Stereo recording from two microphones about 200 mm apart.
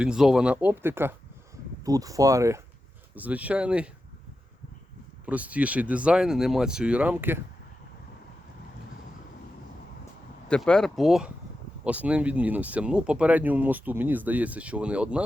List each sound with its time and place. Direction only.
0.0 s speech: 5° right (ahead or behind)
5.2 s speech: 5° right (ahead or behind)
10.5 s speech: 5° left (ahead or behind)